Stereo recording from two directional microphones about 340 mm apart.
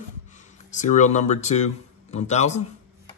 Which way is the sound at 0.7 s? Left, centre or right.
Left.